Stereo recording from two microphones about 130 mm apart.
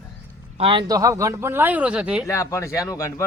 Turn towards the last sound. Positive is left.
turn(degrees=25)  # may be behind; listen again after turning